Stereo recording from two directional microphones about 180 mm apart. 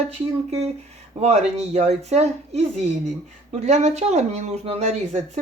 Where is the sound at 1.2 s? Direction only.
35° right (ahead or behind).